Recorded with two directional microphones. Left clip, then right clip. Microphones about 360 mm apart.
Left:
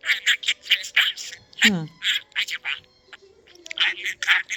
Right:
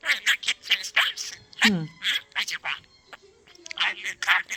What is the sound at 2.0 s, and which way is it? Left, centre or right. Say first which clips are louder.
Music: left 3 dB; centre.